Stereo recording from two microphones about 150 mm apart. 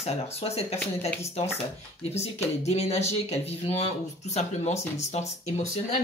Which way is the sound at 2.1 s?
45° left (ahead or behind).